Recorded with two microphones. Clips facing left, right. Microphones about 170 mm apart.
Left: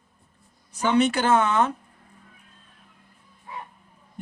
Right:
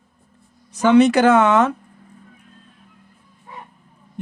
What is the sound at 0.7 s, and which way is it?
Speech, 90° right.